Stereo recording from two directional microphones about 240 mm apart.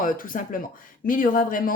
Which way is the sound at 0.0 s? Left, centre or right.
Left.